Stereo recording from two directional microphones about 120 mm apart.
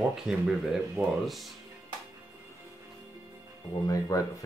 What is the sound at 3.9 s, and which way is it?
Speech, 30° left (ahead or behind).